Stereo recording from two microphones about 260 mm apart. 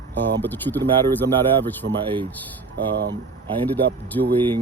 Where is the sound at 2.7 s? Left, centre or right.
Right.